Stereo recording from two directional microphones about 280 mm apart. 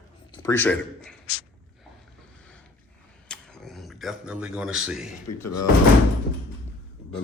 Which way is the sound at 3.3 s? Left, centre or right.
Centre.